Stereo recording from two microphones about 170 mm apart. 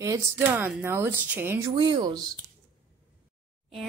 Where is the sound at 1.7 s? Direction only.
25° right (ahead or behind).